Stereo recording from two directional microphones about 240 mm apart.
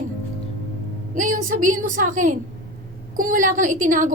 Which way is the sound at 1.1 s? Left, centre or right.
Right.